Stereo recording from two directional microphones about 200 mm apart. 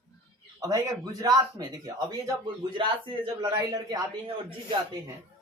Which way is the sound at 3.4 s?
20° right (ahead or behind).